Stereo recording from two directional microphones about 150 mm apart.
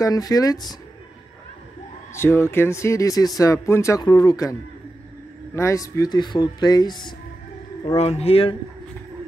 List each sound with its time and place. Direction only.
0.0 s speech: 25° left (ahead or behind)
2.1 s speech: 15° left (ahead or behind)
7.8 s a man's voice: 45° left (ahead or behind)